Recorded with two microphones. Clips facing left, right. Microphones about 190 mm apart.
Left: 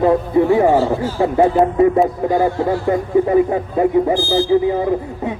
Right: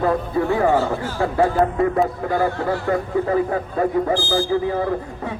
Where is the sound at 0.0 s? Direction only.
20° left (ahead or behind).